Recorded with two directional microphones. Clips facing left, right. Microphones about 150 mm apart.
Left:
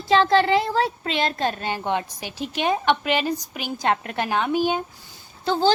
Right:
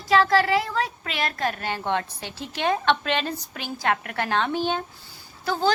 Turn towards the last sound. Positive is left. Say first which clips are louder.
# left 4 dB
turn(degrees=25)  # may be behind; listen again after turning